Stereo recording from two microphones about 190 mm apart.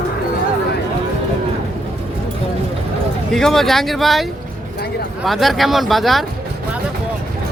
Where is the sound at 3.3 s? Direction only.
Centre (ahead or behind).